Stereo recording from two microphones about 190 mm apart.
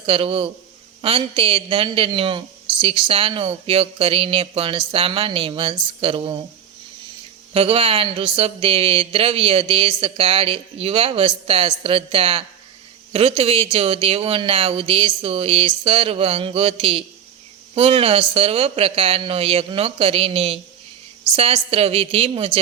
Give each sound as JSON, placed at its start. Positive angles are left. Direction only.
{"t": 0.0, "sound": "speech", "side_deg": -30}
{"t": 7.5, "sound": "speech", "side_deg": -30}